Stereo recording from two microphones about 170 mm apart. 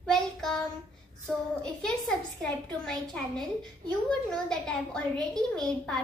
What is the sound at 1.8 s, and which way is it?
A child's voice, 5° left (ahead or behind).